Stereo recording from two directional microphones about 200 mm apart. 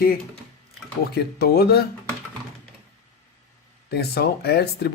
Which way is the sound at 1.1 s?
50° left (ahead or behind).